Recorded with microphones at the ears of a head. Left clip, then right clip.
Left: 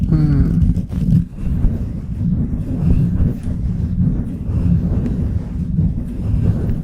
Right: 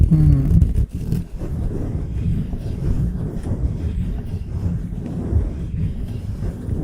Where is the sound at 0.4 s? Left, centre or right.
Left.